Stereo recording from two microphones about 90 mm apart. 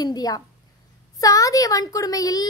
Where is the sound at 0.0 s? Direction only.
45° left (ahead or behind).